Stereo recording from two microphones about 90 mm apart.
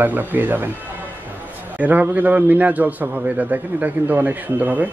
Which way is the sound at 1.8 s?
20° right (ahead or behind).